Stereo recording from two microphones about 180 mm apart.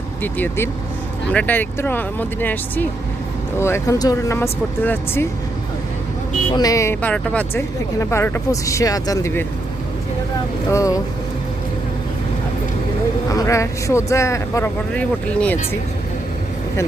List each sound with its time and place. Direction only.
0.2 s speech: 10° left (ahead or behind)
6.6 s speech: 20° left (ahead or behind)
10.7 s speech: 15° left (ahead or behind)
13.3 s speech: 15° left (ahead or behind)